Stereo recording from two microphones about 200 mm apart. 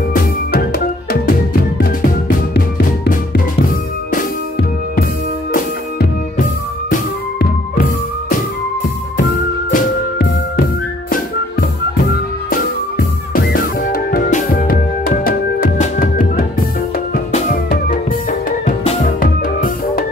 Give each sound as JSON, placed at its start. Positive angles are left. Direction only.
{"t": 0.1, "sound": "music", "side_deg": 50}
{"t": 5.5, "sound": "music", "side_deg": 45}
{"t": 9.7, "sound": "music", "side_deg": 45}
{"t": 12.4, "sound": "music", "side_deg": 45}